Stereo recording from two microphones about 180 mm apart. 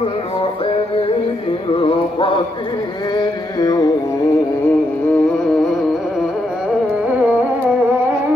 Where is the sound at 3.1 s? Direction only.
20° left (ahead or behind).